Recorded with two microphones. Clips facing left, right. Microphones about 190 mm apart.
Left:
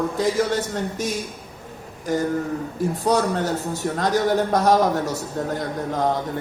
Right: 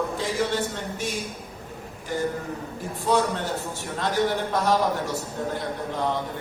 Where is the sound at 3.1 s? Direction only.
40° left (ahead or behind).